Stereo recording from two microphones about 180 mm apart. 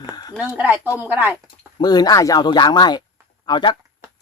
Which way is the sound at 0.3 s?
10° right (ahead or behind).